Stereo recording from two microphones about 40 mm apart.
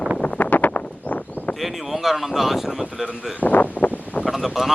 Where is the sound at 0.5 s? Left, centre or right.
Left.